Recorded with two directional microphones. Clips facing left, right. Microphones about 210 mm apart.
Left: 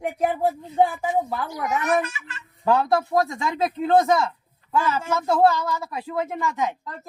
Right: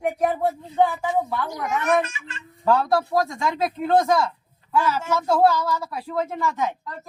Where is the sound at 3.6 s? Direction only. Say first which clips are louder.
Left 2 dB; 20° left (ahead or behind).